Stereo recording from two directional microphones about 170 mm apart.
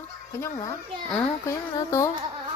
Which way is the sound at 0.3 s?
20° left (ahead or behind).